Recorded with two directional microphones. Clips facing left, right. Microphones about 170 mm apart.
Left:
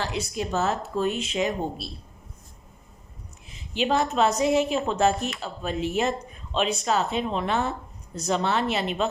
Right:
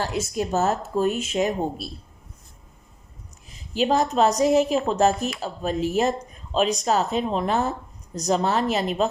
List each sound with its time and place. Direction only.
0.0 s speech: 45° right (ahead or behind)
3.5 s speech: 40° right (ahead or behind)